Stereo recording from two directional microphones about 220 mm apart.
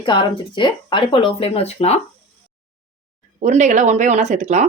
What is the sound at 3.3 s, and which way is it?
Speech, 35° right (ahead or behind).